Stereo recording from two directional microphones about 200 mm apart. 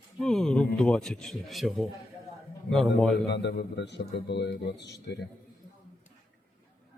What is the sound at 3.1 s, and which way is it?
A man's voice, 60° left (ahead or behind).